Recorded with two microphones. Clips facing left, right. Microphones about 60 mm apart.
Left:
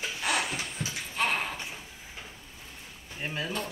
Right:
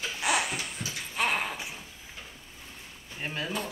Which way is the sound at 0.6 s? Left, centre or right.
Left.